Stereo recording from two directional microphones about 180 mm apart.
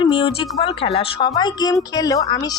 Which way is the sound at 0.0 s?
30° left (ahead or behind).